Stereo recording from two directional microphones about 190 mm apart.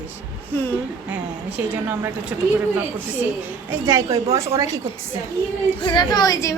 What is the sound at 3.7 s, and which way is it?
Speech, 15° right (ahead or behind).